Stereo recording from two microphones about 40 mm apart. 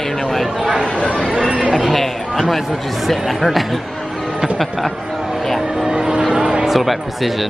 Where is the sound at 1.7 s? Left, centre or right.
Centre.